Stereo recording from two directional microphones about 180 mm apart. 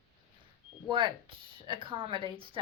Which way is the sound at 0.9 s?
25° right (ahead or behind).